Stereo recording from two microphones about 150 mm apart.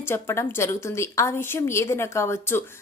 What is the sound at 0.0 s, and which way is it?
A woman's voice, 15° left (ahead or behind).